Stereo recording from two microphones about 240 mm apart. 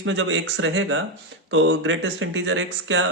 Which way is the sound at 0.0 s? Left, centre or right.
Right.